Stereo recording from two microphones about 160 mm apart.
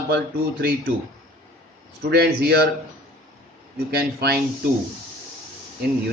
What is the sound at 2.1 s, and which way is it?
Speech, 80° right.